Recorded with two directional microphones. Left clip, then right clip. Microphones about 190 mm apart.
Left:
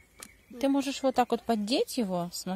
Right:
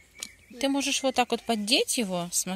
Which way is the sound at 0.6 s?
10° left (ahead or behind).